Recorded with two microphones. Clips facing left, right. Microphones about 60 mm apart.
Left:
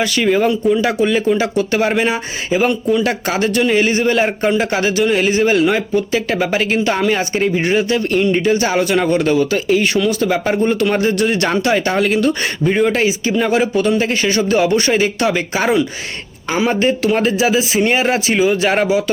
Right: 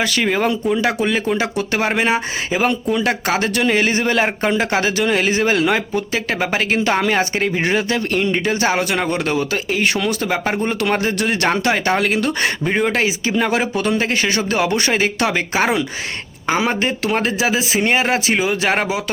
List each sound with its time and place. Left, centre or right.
0.0 s speech: right
3.5 s speech: right
6.4 s speech: right
6.7 s speech: right
8.6 s speech: right
11.5 s speech: right
17.0 s speech: right
18.9 s speech: right